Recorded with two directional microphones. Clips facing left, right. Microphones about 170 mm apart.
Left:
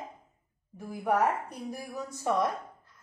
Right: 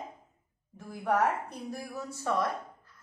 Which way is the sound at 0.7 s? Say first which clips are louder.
Left 1 dB; 10° left (ahead or behind).